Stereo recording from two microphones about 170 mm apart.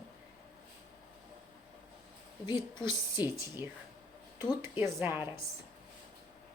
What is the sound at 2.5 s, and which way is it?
Speech, 25° left (ahead or behind).